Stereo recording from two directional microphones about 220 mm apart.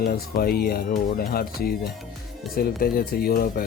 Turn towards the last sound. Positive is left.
turn(degrees=45)  # may be behind; listen again after turning